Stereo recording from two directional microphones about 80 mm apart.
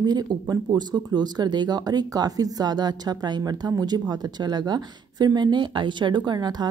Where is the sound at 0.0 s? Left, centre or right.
Right.